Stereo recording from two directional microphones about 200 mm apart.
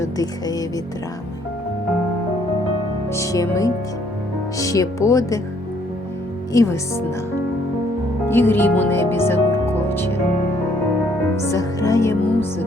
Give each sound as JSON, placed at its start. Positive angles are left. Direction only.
{"t": 0.0, "sound": "music", "side_deg": 20}
{"t": 3.1, "sound": "music", "side_deg": 15}
{"t": 6.5, "sound": "music", "side_deg": 15}
{"t": 8.3, "sound": "speech", "side_deg": 10}
{"t": 11.5, "sound": "music", "side_deg": 15}